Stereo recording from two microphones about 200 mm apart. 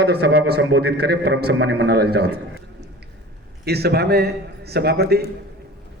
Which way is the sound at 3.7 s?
55° right (ahead or behind).